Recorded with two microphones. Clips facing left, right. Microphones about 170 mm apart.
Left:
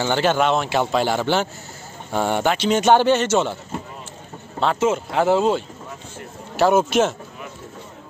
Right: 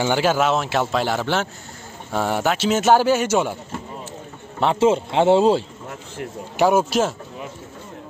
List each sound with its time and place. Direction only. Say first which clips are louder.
0.0 s speech: even; 10° right (ahead or behind)
4.7 s speech: right 4 dB; 30° right (ahead or behind)
6.5 s speech: even; 10° right (ahead or behind)